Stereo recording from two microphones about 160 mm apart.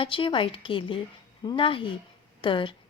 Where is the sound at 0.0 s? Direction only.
30° left (ahead or behind).